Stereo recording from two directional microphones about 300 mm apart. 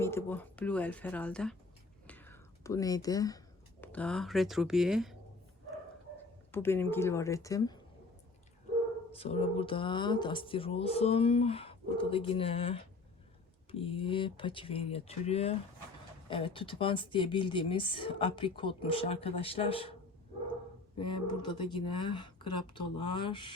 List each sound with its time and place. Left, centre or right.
0.0 s speech: centre
6.5 s speech: centre
9.1 s speech: centre
21.0 s speech: centre